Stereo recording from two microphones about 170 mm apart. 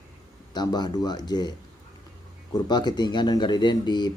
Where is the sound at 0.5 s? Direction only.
25° left (ahead or behind).